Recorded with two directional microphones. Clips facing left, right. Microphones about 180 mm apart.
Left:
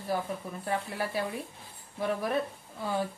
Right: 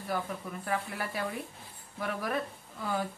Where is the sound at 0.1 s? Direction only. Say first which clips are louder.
Left 1 dB; 25° left (ahead or behind).